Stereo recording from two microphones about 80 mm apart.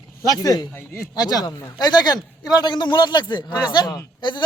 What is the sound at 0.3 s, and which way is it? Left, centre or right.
A man's voice, left.